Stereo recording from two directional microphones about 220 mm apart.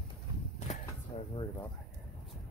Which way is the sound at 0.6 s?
30° left (ahead or behind).